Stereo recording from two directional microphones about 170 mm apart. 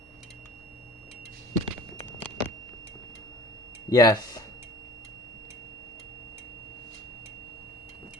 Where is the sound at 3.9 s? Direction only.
20° left (ahead or behind).